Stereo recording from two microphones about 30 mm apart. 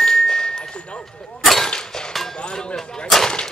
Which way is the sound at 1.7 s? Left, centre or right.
Left.